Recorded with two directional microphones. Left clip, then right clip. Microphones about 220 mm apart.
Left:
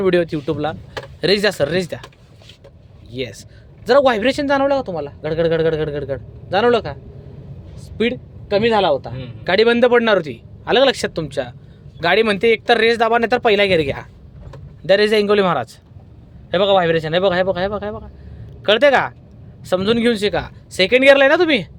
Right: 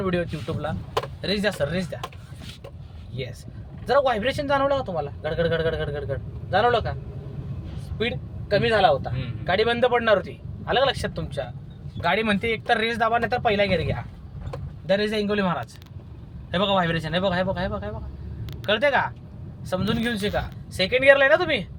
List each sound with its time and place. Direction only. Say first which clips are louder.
0.0 s a man's voice: left 10 dB; 45° left (ahead or behind)
3.1 s a man's voice: left 8 dB; 45° left (ahead or behind)
8.5 s a man's voice: left 4 dB; 40° left (ahead or behind)